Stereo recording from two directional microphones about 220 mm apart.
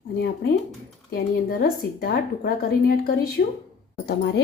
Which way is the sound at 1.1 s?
45° left (ahead or behind).